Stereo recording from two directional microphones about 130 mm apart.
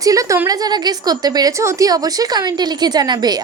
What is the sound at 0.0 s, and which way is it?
A woman's voice, 25° right (ahead or behind).